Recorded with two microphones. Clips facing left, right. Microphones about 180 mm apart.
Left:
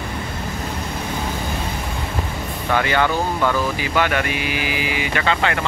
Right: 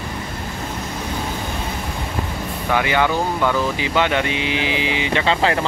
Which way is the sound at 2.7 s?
15° right (ahead or behind).